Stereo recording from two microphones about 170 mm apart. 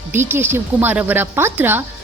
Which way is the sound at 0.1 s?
15° right (ahead or behind).